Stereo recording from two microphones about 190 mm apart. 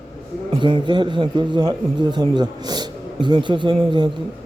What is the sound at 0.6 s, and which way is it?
A man's voice, 25° right (ahead or behind).